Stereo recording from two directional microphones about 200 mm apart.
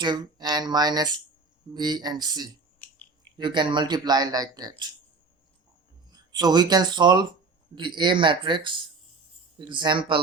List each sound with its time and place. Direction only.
0.0 s speech: 20° right (ahead or behind)
2.7 s a sound: 5° left (ahead or behind)
3.3 s speech: 25° right (ahead or behind)
6.1 s speech: 20° right (ahead or behind)